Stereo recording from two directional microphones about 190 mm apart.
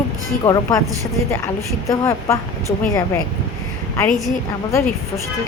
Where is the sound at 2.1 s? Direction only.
15° left (ahead or behind).